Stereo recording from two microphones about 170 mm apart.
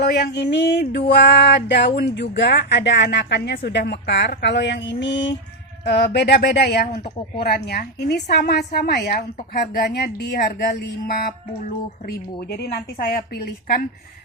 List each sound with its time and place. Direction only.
0.0 s a sound: 70° left (ahead or behind); by 5.4 s 90° left
5.8 s a woman's voice: 80° left
10.8 s a woman's voice: 65° left (ahead or behind)